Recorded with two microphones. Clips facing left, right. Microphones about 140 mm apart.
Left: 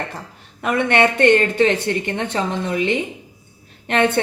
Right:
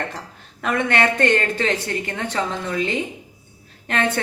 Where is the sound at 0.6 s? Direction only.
20° left (ahead or behind).